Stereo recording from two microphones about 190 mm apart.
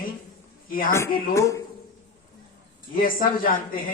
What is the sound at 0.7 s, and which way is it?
Speech, 50° left (ahead or behind).